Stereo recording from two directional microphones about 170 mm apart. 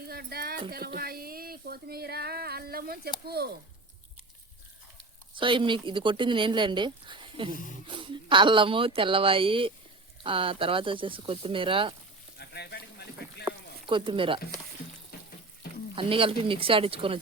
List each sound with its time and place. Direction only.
0.1 s a sound: 65° right (ahead or behind)
3.2 s speech: 70° right (ahead or behind)
5.3 s speech: 30° right (ahead or behind)
12.4 s a sound: 70° left (ahead or behind)
13.8 s speech: 30° right (ahead or behind)
15.1 s water tap: 65° left (ahead or behind)
16.0 s speech: 30° right (ahead or behind)